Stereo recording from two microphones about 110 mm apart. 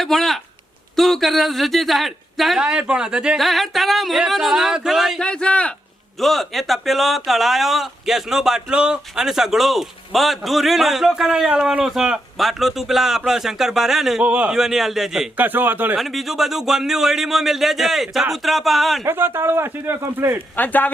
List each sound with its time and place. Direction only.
0.0 s speech: centre (ahead or behind)
5.2 s a man's voice: 10° left (ahead or behind)
15.4 s speech: 15° right (ahead or behind)
16.0 s speech: centre (ahead or behind)
19.0 s speech: 20° right (ahead or behind)
20.6 s a man's voice: 15° left (ahead or behind)